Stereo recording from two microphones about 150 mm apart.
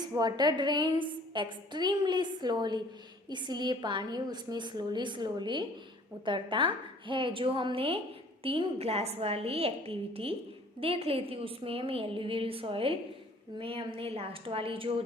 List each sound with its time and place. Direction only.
0.2 s a woman's voice: 30° right (ahead or behind)